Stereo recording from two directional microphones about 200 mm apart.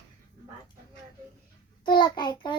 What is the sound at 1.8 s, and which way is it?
Child singing, 20° left (ahead or behind).